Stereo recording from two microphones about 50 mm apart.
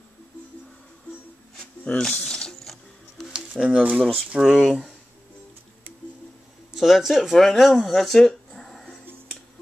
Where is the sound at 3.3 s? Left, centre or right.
Centre.